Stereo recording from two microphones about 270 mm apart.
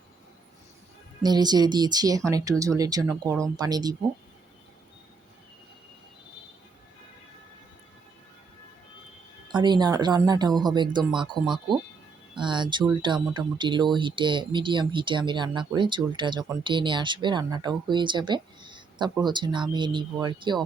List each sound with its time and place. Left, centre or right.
1.2 s speech: centre
9.5 s speech: centre
12.3 s speech: centre